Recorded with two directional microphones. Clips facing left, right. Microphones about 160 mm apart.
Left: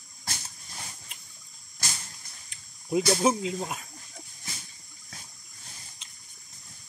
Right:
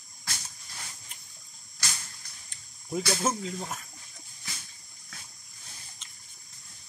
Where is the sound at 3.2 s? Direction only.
15° left (ahead or behind).